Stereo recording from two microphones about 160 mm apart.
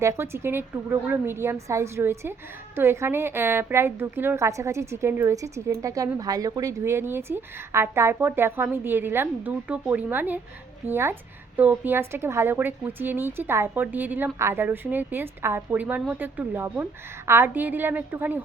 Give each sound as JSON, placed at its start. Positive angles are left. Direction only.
{"t": 0.0, "sound": "a woman's voice", "side_deg": -15}